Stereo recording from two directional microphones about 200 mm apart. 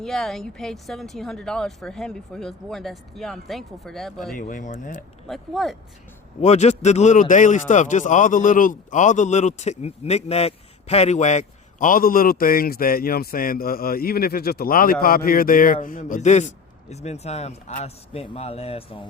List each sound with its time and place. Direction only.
0.0 s a woman's voice: centre (ahead or behind)
4.4 s speech: 40° left (ahead or behind)
5.3 s a woman's voice: centre (ahead or behind)
6.4 s speech: 35° left (ahead or behind)